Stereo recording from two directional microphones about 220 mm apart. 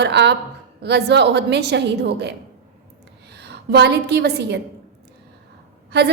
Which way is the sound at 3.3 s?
50° right (ahead or behind).